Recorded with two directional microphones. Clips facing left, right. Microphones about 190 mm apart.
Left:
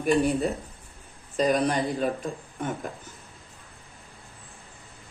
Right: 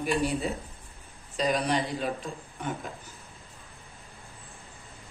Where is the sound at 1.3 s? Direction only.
50° left (ahead or behind).